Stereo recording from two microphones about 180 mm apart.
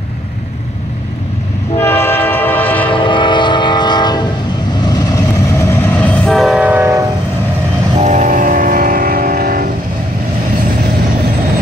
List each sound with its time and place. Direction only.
1.8 s train: 15° left (ahead or behind)
2.9 s train: 25° left (ahead or behind); by 7.1 s 15° right (ahead or behind)
8.0 s train: 40° right (ahead or behind)